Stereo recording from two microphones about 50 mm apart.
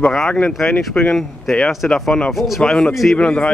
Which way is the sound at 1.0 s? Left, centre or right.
Left.